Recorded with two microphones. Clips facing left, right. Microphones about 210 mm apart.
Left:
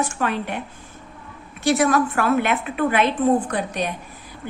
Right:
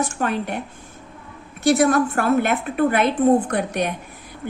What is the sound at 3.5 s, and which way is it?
Speech, 60° right (ahead or behind).